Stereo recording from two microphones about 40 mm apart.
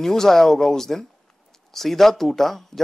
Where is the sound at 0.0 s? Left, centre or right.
Centre.